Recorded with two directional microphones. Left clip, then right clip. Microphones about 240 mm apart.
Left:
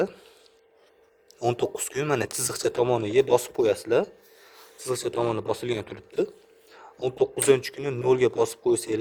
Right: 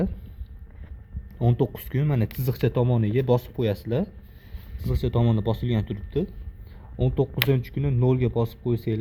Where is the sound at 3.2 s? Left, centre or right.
Centre.